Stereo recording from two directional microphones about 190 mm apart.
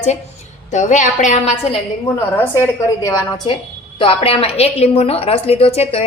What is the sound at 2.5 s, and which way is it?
A woman's voice, 15° left (ahead or behind).